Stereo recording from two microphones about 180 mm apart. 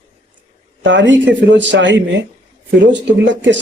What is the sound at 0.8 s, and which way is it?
Speech, 90° right.